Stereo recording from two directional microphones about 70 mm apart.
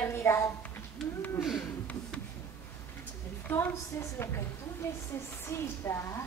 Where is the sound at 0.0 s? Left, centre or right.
Left.